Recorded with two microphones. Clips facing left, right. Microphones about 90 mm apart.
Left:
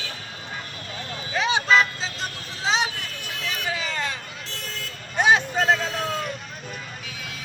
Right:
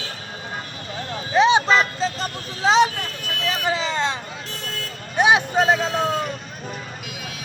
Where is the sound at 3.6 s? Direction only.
20° right (ahead or behind).